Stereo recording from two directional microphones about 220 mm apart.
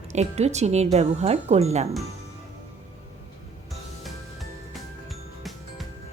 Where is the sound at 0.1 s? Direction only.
30° right (ahead or behind).